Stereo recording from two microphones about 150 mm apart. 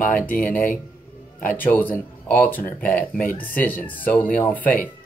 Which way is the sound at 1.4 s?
10° left (ahead or behind).